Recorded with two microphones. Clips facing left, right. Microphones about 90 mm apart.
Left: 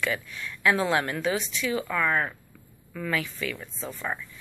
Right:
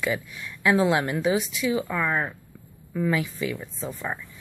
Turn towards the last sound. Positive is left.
turn(degrees=-10)  # may be behind; listen again after turning